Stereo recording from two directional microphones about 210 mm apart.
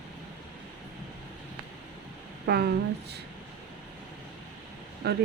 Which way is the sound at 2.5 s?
50° right (ahead or behind).